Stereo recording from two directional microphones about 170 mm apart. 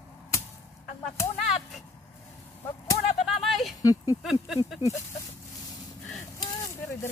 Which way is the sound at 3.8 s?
20° left (ahead or behind).